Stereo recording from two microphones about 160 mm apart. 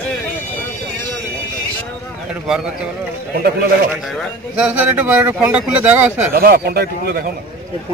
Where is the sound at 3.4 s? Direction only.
75° right (ahead or behind).